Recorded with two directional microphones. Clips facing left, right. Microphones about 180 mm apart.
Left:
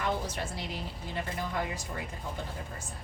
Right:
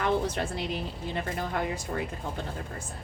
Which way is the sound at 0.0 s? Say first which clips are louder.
Right 6 dB; 65° right (ahead or behind).